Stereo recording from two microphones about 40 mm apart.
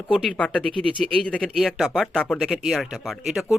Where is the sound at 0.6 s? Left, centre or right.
Left.